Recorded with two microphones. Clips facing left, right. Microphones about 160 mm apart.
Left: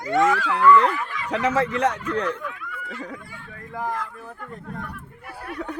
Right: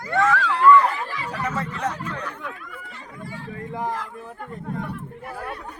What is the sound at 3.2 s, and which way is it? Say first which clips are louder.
Speech: right 7 dB; 30° right (ahead or behind).